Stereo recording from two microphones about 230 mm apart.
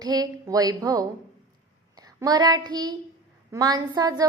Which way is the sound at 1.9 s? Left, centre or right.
Centre.